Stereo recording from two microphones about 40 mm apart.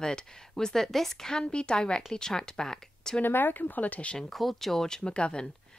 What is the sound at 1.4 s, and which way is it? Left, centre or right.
A woman's voice, left.